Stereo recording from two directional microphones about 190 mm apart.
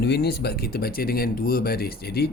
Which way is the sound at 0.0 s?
60° left (ahead or behind).